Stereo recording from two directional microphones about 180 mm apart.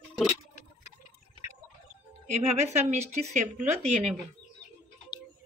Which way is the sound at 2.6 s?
40° right (ahead or behind).